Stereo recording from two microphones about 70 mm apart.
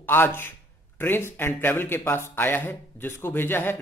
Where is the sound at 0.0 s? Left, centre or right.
Left.